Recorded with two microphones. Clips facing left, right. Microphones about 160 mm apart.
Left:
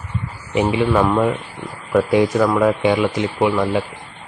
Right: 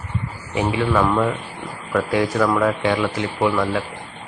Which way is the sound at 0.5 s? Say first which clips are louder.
Left 3 dB; 20° left (ahead or behind).